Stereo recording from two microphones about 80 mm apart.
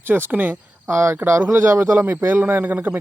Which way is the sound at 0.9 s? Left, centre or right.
Right.